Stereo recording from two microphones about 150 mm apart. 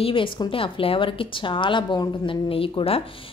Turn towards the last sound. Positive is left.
turn(degrees=40)  # may be behind; listen again after turning